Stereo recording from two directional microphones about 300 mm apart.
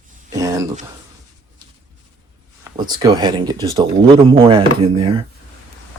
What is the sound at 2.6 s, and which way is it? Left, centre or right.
Speech, centre.